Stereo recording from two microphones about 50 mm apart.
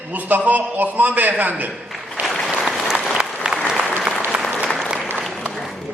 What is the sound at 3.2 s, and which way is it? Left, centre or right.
Applause, centre.